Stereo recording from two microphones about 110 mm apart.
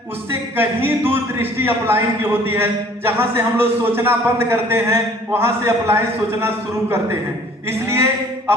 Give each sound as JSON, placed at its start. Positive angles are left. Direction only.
{"t": 0.3, "sound": "a man's voice", "side_deg": -20}
{"t": 7.7, "sound": "a man's voice", "side_deg": -20}